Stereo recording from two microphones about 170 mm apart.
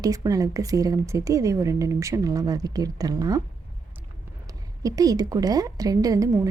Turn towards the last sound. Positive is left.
turn(degrees=-20)  # may be behind; listen again after turning